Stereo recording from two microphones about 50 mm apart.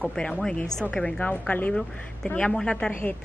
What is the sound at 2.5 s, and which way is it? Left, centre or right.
Speech, centre.